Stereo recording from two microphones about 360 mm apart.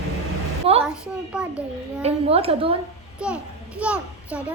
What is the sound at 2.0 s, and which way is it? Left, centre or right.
Speech, centre.